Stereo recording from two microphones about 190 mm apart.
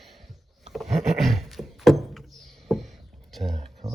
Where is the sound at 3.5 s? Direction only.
35° right (ahead or behind).